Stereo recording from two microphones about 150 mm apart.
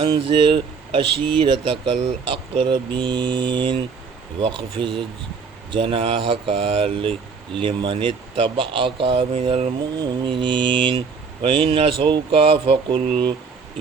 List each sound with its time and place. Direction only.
0.0 s mantra: 35° right (ahead or behind)